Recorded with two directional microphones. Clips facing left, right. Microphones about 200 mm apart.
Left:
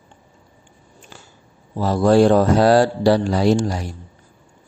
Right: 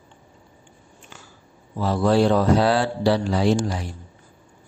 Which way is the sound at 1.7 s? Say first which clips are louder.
Left 5 dB; 40° left (ahead or behind).